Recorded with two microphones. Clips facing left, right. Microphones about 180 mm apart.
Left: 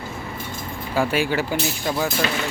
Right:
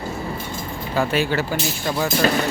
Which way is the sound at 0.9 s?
10° left (ahead or behind).